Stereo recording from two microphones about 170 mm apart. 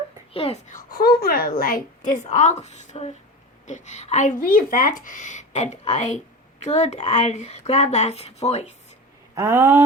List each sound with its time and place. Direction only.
0.3 s speech: 40° left (ahead or behind)
0.9 s a woman's voice: 60° left (ahead or behind); by 8.7 s 40° left (ahead or behind)
9.3 s speech: 15° right (ahead or behind)